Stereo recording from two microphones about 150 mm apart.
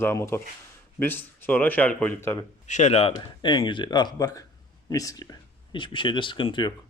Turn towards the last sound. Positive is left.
turn(degrees=30)  # may be behind; listen again after turning